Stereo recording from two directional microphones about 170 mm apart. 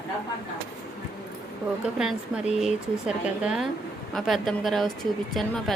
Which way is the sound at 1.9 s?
5° right (ahead or behind).